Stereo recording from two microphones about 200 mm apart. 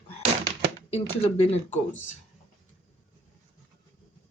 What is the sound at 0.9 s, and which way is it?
Speech, 30° left (ahead or behind).